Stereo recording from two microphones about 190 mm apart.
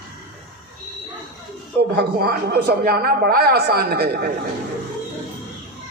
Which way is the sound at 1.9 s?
55° right (ahead or behind).